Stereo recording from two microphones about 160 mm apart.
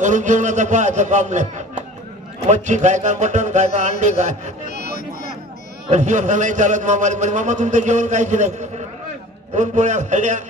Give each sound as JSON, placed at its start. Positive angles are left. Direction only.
{"t": 0.0, "sound": "a man's voice", "side_deg": -50}
{"t": 5.9, "sound": "a man's voice", "side_deg": -45}